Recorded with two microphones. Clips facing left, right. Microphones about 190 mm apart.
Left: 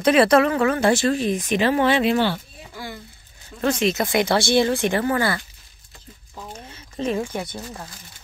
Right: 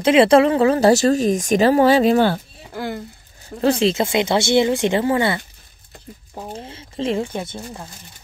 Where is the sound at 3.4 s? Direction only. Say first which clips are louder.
Right 4 dB; 35° right (ahead or behind).